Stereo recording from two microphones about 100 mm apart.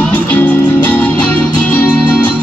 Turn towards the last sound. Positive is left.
turn(degrees=15)  # may be behind; listen again after turning